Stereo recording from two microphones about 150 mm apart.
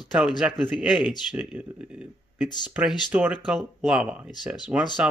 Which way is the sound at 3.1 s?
10° right (ahead or behind).